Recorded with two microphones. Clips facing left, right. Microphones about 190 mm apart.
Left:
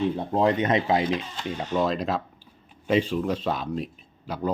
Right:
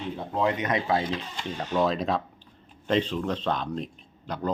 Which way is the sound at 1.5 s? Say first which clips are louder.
Even; 5° left (ahead or behind).